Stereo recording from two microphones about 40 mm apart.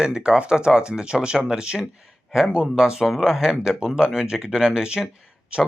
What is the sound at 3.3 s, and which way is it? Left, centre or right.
Speech, centre.